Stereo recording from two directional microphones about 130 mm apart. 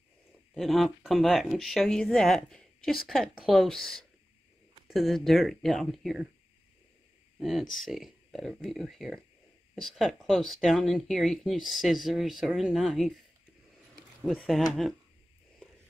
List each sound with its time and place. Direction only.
0.6 s speech: centre (ahead or behind)
7.3 s speech: centre (ahead or behind)
14.2 s speech: 5° left (ahead or behind)